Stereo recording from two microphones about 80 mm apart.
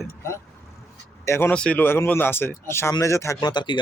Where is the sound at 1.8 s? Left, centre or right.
Left.